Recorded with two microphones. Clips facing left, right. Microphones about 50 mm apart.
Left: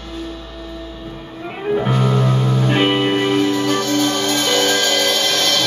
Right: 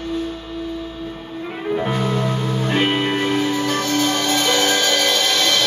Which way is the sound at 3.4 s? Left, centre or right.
Centre.